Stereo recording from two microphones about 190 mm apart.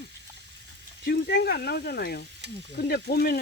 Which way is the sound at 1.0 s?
60° left (ahead or behind).